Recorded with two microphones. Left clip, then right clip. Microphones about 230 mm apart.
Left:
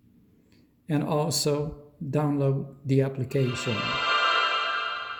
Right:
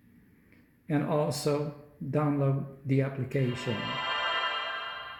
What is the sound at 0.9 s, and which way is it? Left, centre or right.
Speech, left.